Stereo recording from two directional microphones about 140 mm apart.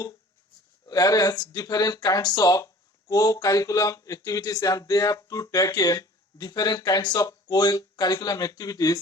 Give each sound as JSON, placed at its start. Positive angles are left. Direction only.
{"t": 0.9, "sound": "speech", "side_deg": 25}